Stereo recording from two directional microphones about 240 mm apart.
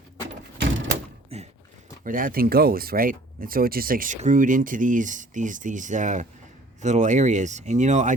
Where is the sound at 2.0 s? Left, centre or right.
Right.